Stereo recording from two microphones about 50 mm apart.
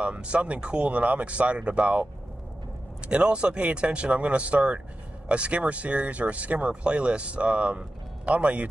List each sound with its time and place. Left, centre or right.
0.0 s speech: right
3.1 s speech: right